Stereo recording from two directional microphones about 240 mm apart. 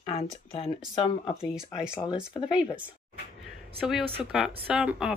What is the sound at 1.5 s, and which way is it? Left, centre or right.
Speech, centre.